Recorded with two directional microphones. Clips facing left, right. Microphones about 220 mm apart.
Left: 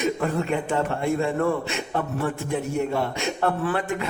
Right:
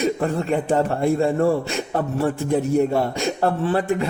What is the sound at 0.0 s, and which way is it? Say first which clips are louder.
A man's voice: right 3 dB; 30° right (ahead or behind).